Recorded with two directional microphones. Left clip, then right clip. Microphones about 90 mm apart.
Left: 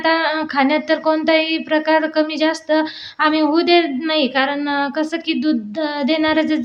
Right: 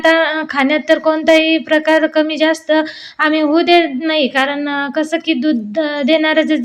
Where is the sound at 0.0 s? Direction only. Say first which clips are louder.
Right 5 dB; 35° right (ahead or behind).